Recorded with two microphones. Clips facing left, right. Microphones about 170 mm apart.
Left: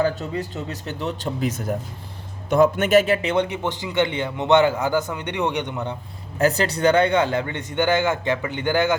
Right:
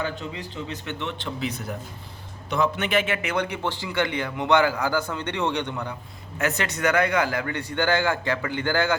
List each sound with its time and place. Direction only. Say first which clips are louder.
0.0 s a man's voice: left 8 dB; 45° left (ahead or behind); by 6.0 s 20° left (ahead or behind)
6.4 s a man's voice: left 6 dB; 35° left (ahead or behind)